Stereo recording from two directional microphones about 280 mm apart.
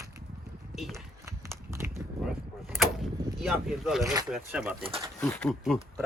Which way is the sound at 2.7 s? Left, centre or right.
Centre.